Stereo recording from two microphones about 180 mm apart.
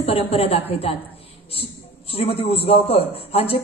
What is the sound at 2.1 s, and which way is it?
A woman's voice, 30° left (ahead or behind).